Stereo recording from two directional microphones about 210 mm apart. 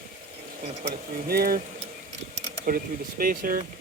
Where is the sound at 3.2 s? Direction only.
40° right (ahead or behind).